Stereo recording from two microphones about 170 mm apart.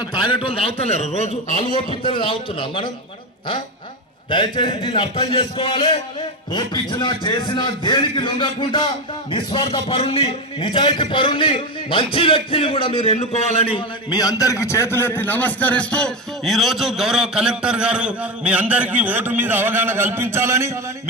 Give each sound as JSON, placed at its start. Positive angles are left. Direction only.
{"t": 0.0, "sound": "a man's voice", "side_deg": 25}
{"t": 4.3, "sound": "a man's voice", "side_deg": 25}